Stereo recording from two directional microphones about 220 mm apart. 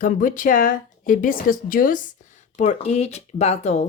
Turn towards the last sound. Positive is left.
turn(degrees=30)  # may be behind; listen again after turning